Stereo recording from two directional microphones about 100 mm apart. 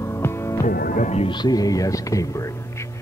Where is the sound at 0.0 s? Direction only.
25° left (ahead or behind).